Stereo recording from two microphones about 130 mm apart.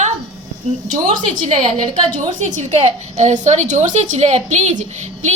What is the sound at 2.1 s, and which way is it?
A woman's voice, 65° right (ahead or behind).